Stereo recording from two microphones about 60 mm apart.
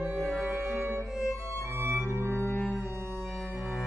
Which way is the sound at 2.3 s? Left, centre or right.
Left.